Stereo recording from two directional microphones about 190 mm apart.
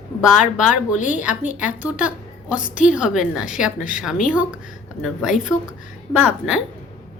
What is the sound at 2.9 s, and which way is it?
A woman's voice, 5° right (ahead or behind).